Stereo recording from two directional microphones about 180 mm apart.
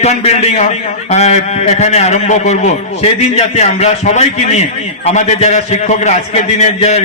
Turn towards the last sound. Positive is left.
turn(degrees=40)  # may be behind; listen again after turning